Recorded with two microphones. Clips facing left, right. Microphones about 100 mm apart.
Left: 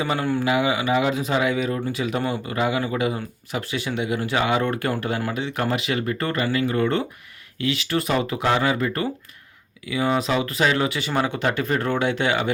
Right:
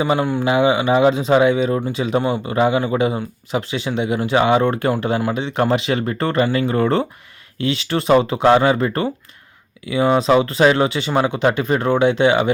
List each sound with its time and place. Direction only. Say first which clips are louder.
0.0 s speech: right 5 dB; 20° right (ahead or behind)